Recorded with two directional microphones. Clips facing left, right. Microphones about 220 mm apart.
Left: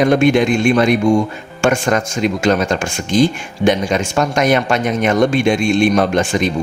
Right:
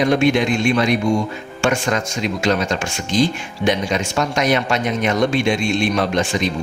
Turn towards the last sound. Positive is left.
turn(degrees=50)  # may be behind; listen again after turning